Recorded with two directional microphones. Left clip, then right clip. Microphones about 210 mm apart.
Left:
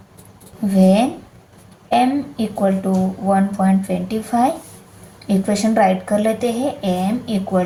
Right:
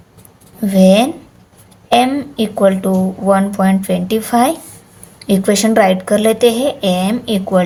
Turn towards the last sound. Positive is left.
turn(degrees=-45)  # may be behind; listen again after turning